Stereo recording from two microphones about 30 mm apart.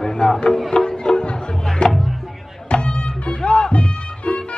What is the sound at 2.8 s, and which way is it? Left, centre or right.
Music, left.